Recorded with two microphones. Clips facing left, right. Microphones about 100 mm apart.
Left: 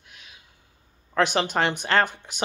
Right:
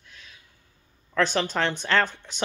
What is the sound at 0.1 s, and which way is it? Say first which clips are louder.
Gasp: even; 15° left (ahead or behind).